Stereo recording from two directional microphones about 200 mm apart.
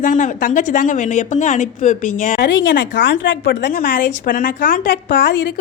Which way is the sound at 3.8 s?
45° left (ahead or behind).